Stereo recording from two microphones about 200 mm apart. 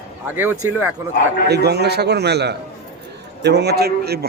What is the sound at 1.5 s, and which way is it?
A man's voice, 55° right (ahead or behind).